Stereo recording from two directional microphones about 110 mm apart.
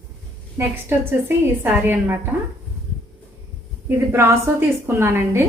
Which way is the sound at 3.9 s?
25° right (ahead or behind).